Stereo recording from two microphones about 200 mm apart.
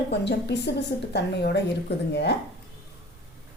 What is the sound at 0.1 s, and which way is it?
A woman's voice, 60° left (ahead or behind).